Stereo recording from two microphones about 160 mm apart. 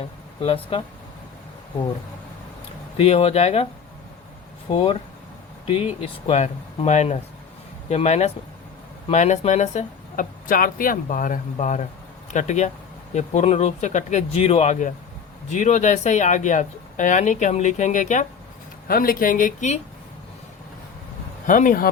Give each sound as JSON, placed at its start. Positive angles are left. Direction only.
{"t": 0.4, "sound": "speech", "side_deg": 35}
{"t": 3.0, "sound": "speech", "side_deg": 40}
{"t": 4.7, "sound": "speech", "side_deg": 40}
{"t": 18.9, "sound": "speech", "side_deg": 65}
{"t": 21.4, "sound": "speech", "side_deg": 55}